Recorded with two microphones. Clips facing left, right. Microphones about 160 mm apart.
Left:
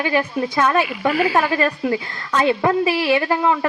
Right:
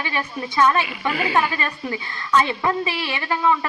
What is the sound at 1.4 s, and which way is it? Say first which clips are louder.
A woman's voice: left 4 dB; 55° left (ahead or behind).